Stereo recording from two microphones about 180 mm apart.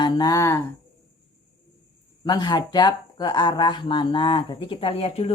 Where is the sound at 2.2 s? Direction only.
25° left (ahead or behind).